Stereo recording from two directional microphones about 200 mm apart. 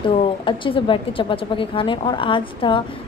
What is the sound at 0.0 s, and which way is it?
Speech, 25° left (ahead or behind).